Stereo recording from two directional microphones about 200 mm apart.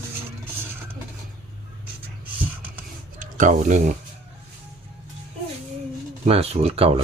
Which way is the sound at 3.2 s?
40° right (ahead or behind).